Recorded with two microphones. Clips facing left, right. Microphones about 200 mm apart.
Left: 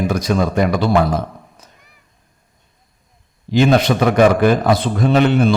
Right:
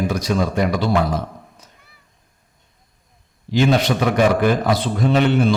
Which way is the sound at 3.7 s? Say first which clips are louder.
Left 3 dB; 55° left (ahead or behind).